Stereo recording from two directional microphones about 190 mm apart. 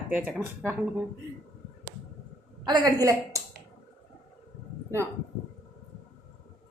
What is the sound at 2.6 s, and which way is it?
Speech, 20° right (ahead or behind).